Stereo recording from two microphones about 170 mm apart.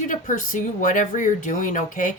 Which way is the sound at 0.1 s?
50° left (ahead or behind).